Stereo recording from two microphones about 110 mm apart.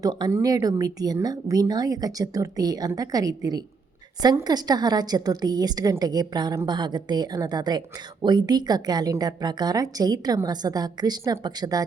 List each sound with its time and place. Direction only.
0.0 s speech: 40° right (ahead or behind)